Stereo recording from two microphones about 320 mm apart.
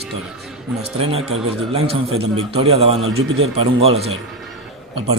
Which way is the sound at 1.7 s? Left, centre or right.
Centre.